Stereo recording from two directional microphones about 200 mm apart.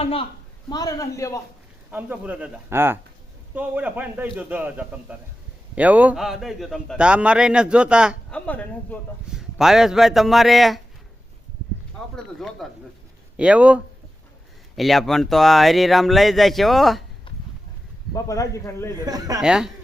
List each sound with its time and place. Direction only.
0.0 s a man's voice: 30° left (ahead or behind)
1.9 s a man's voice: 10° right (ahead or behind)
8.3 s a man's voice: 5° left (ahead or behind)
12.1 s a man's voice: centre (ahead or behind)
18.1 s speech: 15° left (ahead or behind)
19.0 s a man's voice: 20° right (ahead or behind)
19.4 s a man's voice: 5° right (ahead or behind)